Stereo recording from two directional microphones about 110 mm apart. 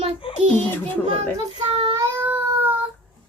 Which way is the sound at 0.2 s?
50° left (ahead or behind).